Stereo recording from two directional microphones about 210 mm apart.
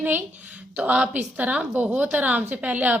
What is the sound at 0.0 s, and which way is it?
A woman's voice, 10° right (ahead or behind).